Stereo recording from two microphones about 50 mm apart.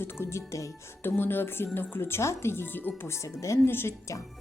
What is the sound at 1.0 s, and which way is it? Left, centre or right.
A woman's voice, left.